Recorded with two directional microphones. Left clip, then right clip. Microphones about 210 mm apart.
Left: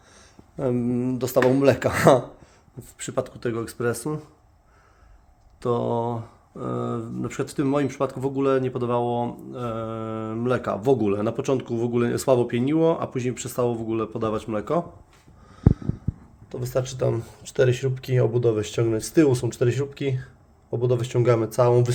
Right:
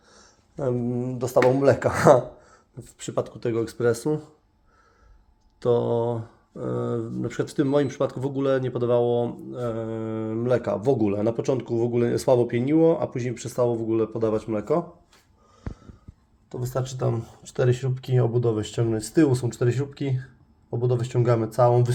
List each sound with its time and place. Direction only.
0.5 s speech: 25° left (ahead or behind)
3.0 s speech: 10° left (ahead or behind)
5.5 s speech: centre (ahead or behind)
16.5 s speech: 15° left (ahead or behind)